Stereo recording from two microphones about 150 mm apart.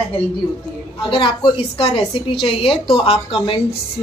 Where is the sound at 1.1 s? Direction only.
35° left (ahead or behind).